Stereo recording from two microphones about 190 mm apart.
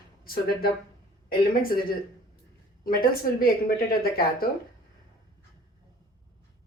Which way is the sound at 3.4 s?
50° left (ahead or behind).